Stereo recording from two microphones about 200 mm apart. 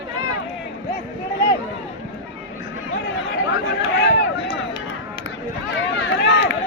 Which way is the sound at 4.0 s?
70° left (ahead or behind).